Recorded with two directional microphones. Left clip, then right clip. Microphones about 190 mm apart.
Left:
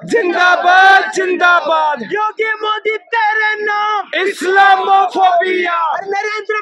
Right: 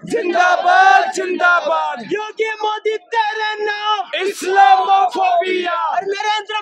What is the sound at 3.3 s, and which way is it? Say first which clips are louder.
Music: left 6 dB; 20° right (ahead or behind).